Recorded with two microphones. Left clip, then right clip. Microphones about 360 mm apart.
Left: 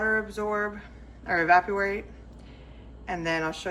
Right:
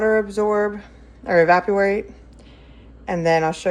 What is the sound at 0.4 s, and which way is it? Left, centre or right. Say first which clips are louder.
Speech: right 10 dB; right.